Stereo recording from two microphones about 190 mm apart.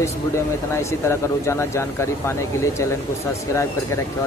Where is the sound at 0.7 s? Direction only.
15° left (ahead or behind).